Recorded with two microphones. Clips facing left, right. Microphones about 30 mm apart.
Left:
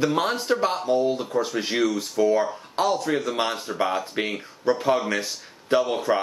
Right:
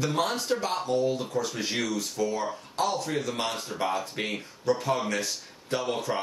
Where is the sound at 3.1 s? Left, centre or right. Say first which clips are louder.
Left 5 dB; centre.